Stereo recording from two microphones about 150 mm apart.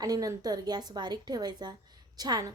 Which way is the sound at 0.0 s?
25° right (ahead or behind).